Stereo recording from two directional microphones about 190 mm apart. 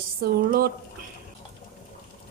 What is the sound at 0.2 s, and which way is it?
Speech, 50° right (ahead or behind).